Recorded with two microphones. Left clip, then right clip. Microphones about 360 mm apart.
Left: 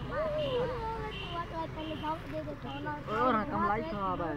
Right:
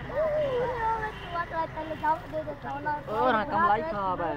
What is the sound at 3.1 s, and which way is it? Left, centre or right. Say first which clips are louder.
Speech: right 4 dB; right.